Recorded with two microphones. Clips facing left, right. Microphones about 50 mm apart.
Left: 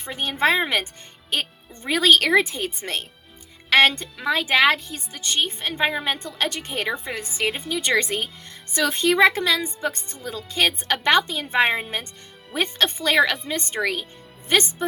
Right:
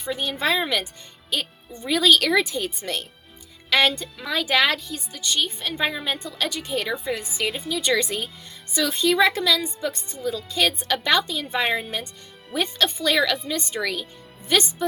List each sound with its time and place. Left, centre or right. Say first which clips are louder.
0.0 s speech: left 3 dB; left
4.3 s speech: left 3 dB; left